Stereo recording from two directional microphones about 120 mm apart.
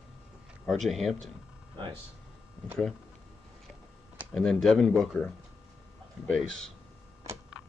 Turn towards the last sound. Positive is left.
turn(degrees=5)  # may be behind; listen again after turning